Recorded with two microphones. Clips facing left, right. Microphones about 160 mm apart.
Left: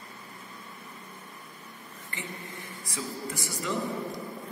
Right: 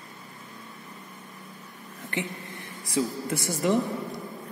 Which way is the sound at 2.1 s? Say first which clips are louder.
Right 9 dB; 70° right (ahead or behind).